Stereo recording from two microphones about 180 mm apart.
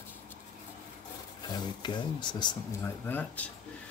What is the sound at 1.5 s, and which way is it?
Speech, 25° left (ahead or behind).